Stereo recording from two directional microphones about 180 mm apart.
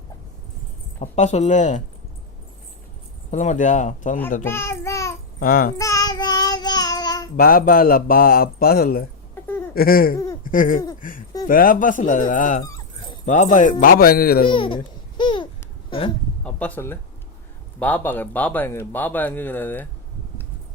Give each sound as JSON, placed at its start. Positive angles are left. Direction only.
{"t": 0.9, "sound": "speech", "side_deg": 40}
{"t": 3.3, "sound": "speech", "side_deg": 40}
{"t": 4.4, "sound": "a sound", "side_deg": 15}
{"t": 5.4, "sound": "speech", "side_deg": 50}
{"t": 5.7, "sound": "child singing", "side_deg": 20}
{"t": 7.3, "sound": "speech", "side_deg": 55}
{"t": 10.4, "sound": "a sound", "side_deg": 50}
{"t": 11.0, "sound": "speech", "side_deg": 50}
{"t": 12.6, "sound": "dog", "side_deg": 20}
{"t": 13.2, "sound": "speech", "side_deg": 40}
{"t": 14.5, "sound": "speech", "side_deg": 30}
{"t": 15.2, "sound": "babbling", "side_deg": 25}
{"t": 15.9, "sound": "a sound", "side_deg": 30}
{"t": 16.4, "sound": "speech", "side_deg": 5}